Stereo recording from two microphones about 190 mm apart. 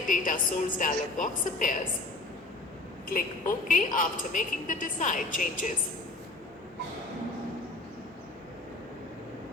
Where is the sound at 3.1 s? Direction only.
45° left (ahead or behind).